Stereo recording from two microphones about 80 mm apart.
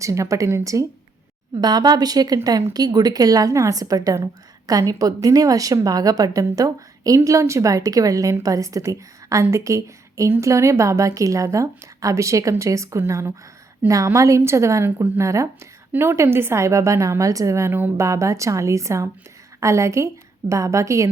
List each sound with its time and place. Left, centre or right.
0.0 s a woman's voice: right
1.5 s a woman's voice: right
15.9 s a woman's voice: right